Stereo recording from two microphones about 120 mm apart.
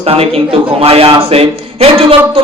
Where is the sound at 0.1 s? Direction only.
55° right (ahead or behind).